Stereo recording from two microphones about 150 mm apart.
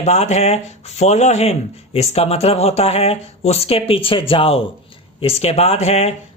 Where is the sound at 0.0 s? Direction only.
50° left (ahead or behind).